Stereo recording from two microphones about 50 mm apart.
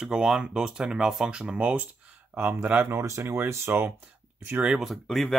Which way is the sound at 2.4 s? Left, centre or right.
Right.